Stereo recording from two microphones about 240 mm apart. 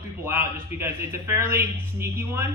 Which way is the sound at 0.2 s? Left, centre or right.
Centre.